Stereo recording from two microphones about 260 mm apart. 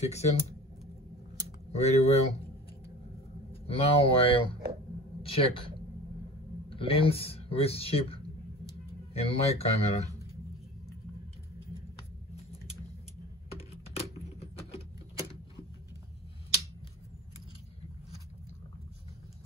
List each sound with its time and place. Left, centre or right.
0.0 s speech: left
1.7 s speech: left
3.6 s speech: left
9.2 s speech: left
13.5 s typing: left